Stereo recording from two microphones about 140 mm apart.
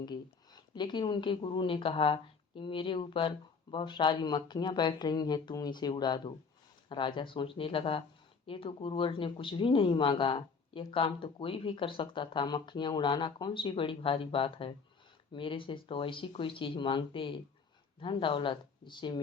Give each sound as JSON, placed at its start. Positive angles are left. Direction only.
{"t": 0.0, "sound": "speech", "side_deg": 30}